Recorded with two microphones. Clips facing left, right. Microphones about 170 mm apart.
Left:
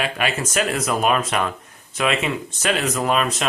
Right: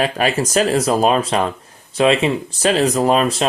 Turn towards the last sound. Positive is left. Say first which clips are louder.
# right 5 dB
turn(degrees=-30)  # may be behind; listen again after turning